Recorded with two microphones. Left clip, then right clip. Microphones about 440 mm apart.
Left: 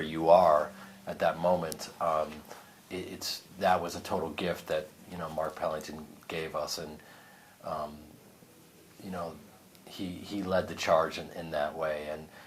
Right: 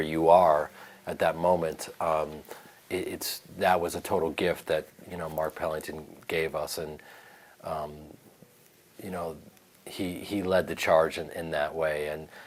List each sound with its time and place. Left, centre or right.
0.0 s speech: right
9.0 s a man's voice: right